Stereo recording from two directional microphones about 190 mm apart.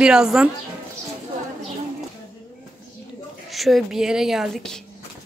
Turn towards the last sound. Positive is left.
turn(degrees=0)  # may be behind; listen again after turning